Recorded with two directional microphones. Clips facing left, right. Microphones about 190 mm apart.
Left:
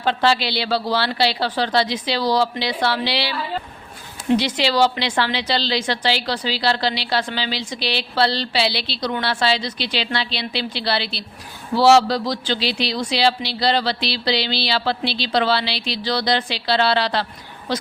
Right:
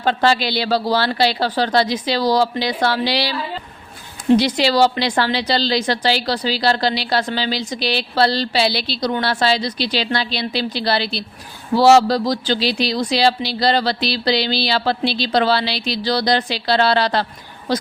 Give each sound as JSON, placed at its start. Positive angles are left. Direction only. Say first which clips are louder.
{"t": 0.0, "sound": "a woman's voice", "louder": "right 2 dB", "side_deg": -45}
{"t": 4.4, "sound": "a woman's voice", "louder": "right 1 dB", "side_deg": -40}